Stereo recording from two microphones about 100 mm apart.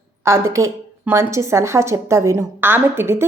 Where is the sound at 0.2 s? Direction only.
25° right (ahead or behind).